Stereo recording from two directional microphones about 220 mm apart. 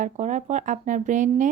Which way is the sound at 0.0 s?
35° right (ahead or behind).